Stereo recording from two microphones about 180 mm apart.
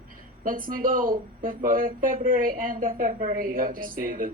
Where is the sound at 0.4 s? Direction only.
50° right (ahead or behind).